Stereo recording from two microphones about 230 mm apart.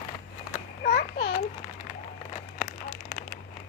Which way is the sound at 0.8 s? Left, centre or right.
Left.